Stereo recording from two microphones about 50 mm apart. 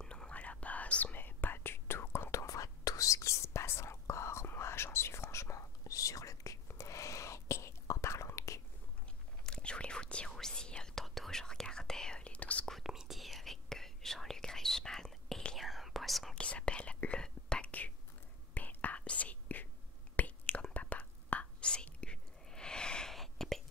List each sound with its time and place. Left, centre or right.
0.0 s whispering: centre
0.3 s whispering: left
1.1 s whispering: left
2.3 s whispering: left
9.4 s whispering: centre
12.8 s whispering: centre
16.3 s whispering: left
17.6 s whispering: left
22.0 s a sound: centre
23.1 s whispering: centre